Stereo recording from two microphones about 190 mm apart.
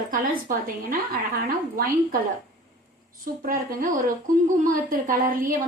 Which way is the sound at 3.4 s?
45° right (ahead or behind).